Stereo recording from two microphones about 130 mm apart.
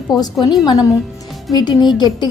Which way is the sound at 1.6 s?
35° left (ahead or behind).